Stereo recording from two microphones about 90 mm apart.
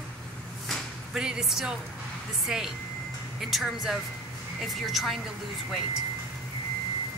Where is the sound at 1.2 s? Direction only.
5° right (ahead or behind).